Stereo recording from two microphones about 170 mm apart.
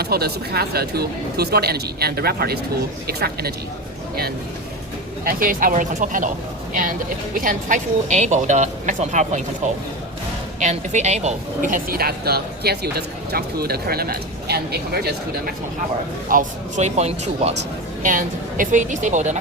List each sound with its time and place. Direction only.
0.0 s speech: 65° right (ahead or behind)
5.2 s a woman's voice: 55° right (ahead or behind)
7.4 s a woman's voice: 50° right (ahead or behind)
10.6 s a woman's voice: 40° right (ahead or behind); by 15.1 s 70° right (ahead or behind)
16.3 s speech: 50° right (ahead or behind)
18.0 s a woman's voice: 50° right (ahead or behind)